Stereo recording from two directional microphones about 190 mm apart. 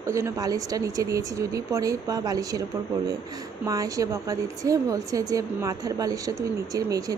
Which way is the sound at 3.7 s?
20° right (ahead or behind).